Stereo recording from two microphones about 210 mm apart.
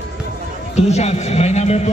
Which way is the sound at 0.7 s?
30° left (ahead or behind).